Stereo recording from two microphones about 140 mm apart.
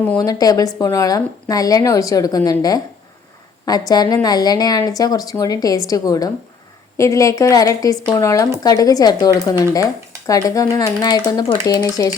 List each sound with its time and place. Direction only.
0.2 s speech: 25° left (ahead or behind)